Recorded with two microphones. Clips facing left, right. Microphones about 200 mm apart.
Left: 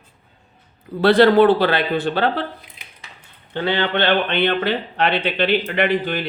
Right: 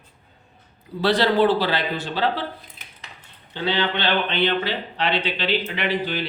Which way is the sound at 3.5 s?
55° left (ahead or behind).